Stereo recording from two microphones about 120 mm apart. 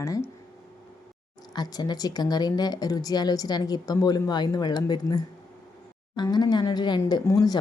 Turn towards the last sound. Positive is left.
turn(degrees=30)  # may be behind; listen again after turning